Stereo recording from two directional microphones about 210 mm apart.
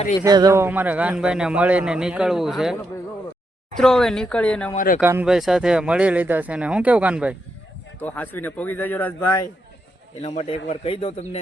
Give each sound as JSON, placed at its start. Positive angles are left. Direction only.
{"t": 0.3, "sound": "a man's voice", "side_deg": -15}
{"t": 3.8, "sound": "a man's voice", "side_deg": 0}
{"t": 4.7, "sound": "speech", "side_deg": 40}
{"t": 4.9, "sound": "a man's voice", "side_deg": -10}
{"t": 7.9, "sound": "a man's voice", "side_deg": 10}
{"t": 10.2, "sound": "speech", "side_deg": 30}